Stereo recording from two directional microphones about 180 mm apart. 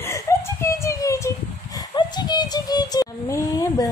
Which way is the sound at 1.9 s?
20° left (ahead or behind).